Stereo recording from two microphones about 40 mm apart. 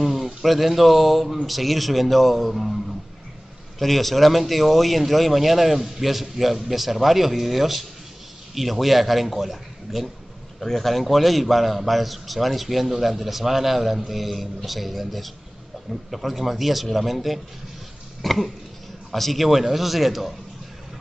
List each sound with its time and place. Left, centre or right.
0.0 s a man's voice: centre
3.8 s a man's voice: centre
18.2 s cough: centre
19.1 s a man's voice: centre